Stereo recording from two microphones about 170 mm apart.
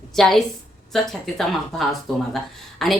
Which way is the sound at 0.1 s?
Centre (ahead or behind).